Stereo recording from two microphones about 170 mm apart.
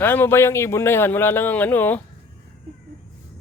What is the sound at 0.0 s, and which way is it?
Speech, 10° left (ahead or behind).